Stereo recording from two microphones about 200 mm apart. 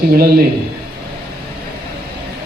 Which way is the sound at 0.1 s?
50° right (ahead or behind).